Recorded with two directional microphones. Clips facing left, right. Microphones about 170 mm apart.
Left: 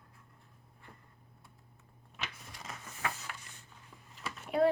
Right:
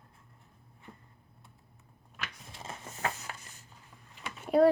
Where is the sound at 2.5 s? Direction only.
30° right (ahead or behind).